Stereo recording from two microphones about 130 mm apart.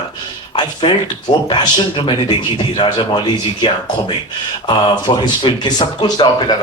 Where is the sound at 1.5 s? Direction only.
35° left (ahead or behind).